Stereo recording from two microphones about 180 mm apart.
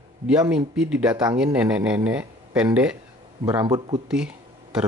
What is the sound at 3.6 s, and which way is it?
Speech, 25° right (ahead or behind).